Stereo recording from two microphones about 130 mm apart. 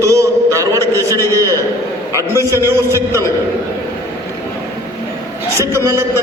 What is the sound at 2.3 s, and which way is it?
Speech, 20° right (ahead or behind).